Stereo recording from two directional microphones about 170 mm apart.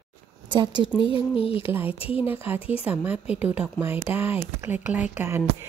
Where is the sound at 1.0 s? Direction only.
30° left (ahead or behind).